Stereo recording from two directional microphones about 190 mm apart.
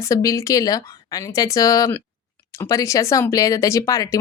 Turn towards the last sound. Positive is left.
turn(degrees=15)  # may be behind; listen again after turning